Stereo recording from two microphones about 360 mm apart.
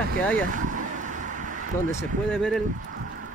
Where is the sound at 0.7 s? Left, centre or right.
Right.